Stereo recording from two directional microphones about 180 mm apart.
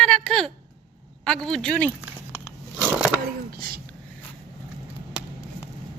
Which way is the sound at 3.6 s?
55° right (ahead or behind).